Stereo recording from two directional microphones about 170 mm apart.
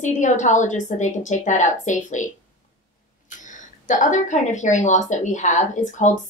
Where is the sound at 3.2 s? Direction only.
45° left (ahead or behind).